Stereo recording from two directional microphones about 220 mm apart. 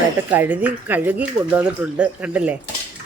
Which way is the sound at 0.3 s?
10° right (ahead or behind).